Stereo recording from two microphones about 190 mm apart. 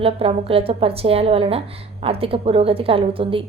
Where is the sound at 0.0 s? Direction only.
30° right (ahead or behind).